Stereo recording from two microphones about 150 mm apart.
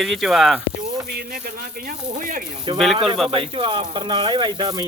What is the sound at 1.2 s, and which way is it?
Speech, 75° right (ahead or behind).